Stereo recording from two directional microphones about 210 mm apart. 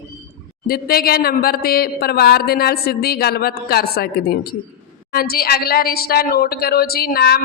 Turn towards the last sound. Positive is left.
turn(degrees=50)  # may be behind; listen again after turning